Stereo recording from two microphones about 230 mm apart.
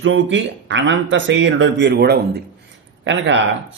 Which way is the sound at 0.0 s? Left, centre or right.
Right.